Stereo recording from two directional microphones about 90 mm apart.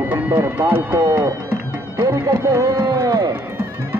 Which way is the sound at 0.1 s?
20° right (ahead or behind).